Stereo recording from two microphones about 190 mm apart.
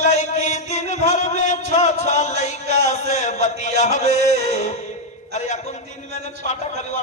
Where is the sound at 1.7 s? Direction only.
40° left (ahead or behind).